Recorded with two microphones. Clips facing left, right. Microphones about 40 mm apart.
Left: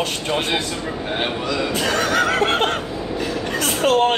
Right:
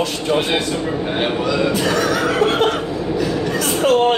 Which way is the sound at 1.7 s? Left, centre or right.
Left.